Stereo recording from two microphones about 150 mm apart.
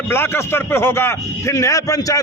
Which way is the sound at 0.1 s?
15° left (ahead or behind).